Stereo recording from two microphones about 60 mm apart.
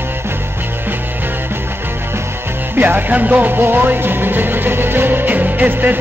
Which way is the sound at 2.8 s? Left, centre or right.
Right.